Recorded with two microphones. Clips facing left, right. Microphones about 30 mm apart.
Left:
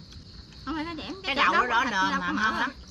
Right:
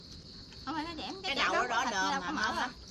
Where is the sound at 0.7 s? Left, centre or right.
Centre.